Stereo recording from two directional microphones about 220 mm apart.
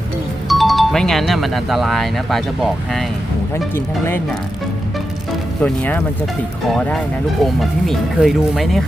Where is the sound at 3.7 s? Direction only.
10° left (ahead or behind).